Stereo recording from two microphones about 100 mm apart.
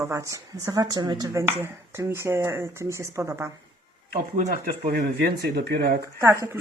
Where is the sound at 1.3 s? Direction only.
25° right (ahead or behind).